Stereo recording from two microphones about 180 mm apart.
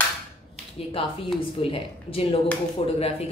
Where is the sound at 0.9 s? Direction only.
30° left (ahead or behind).